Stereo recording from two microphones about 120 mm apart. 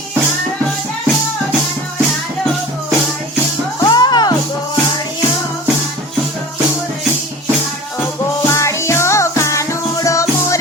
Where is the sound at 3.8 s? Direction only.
35° left (ahead or behind).